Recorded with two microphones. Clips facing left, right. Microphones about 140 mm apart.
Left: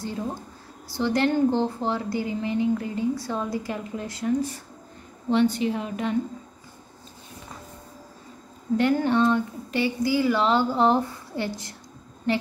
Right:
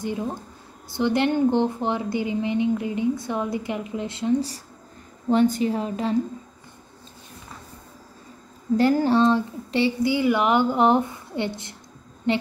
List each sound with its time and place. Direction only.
0.0 s a woman's voice: 20° right (ahead or behind)
5.3 s a woman's voice: 40° right (ahead or behind)
8.7 s a woman's voice: 35° right (ahead or behind)